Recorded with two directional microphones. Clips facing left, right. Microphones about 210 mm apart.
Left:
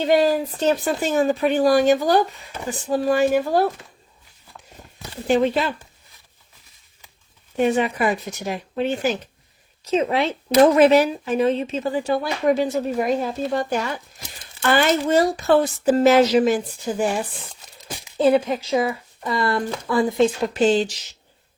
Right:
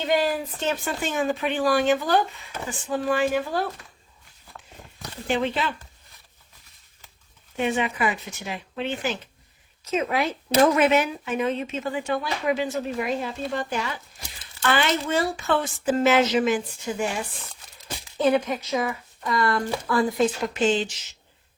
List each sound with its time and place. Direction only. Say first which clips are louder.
0.0 s speech: left 6 dB; 40° left (ahead or behind)
5.3 s speech: left 6 dB; 40° left (ahead or behind)
7.5 s speech: left 6 dB; 40° left (ahead or behind)
17.4 s crumpling: left 3 dB; 15° left (ahead or behind)
18.4 s speech: left 5 dB; 30° left (ahead or behind)